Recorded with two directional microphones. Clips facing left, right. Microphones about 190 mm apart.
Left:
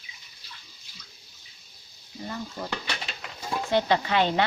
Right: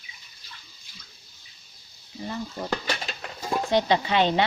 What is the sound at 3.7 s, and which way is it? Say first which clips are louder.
Speech: right 1 dB; 20° right (ahead or behind).